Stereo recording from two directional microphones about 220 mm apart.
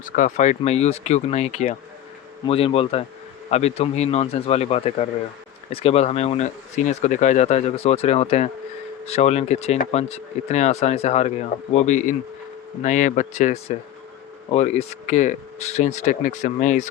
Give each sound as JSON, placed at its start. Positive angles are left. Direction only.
{"t": 0.0, "sound": "speech", "side_deg": 35}